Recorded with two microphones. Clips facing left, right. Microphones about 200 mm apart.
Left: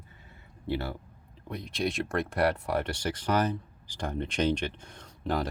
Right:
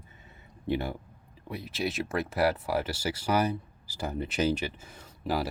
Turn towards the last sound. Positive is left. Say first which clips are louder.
# even
turn(degrees=-5)  # may be behind; listen again after turning